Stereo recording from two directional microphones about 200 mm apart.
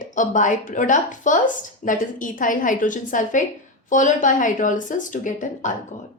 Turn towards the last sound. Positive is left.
turn(degrees=40)  # may be behind; listen again after turning